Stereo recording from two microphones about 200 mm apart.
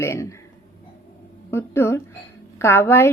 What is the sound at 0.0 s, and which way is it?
Speech, 15° left (ahead or behind).